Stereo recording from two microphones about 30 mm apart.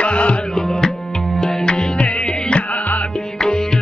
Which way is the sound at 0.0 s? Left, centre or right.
Left.